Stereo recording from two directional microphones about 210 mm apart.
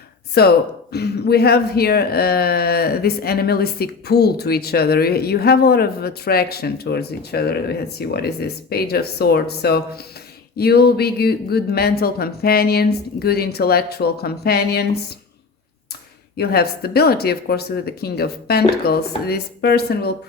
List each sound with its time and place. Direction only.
0.4 s speech: 50° left (ahead or behind)
16.4 s speech: 50° left (ahead or behind)